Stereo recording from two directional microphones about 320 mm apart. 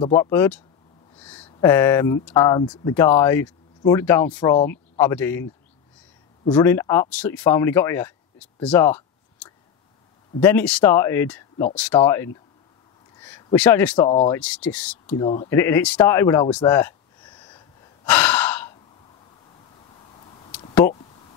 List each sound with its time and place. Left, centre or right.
0.0 s speech: centre
6.5 s speech: centre
14.0 s speech: centre
14.4 s speech: centre
15.2 s a sound: centre